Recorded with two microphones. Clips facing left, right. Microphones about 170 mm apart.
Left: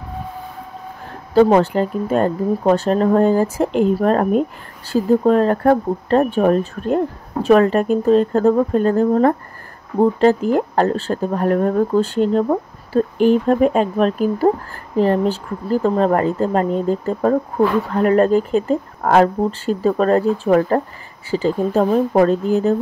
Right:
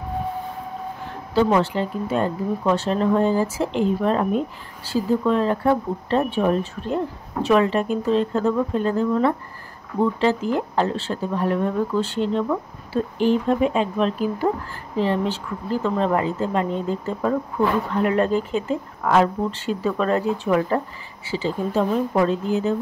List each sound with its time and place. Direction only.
1.3 s speech: 50° left (ahead or behind)
15.7 s speech: 45° left (ahead or behind)